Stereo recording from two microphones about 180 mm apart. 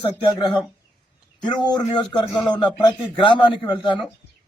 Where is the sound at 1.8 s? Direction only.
30° left (ahead or behind).